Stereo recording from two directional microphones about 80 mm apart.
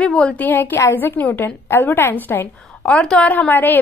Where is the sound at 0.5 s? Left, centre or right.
Left.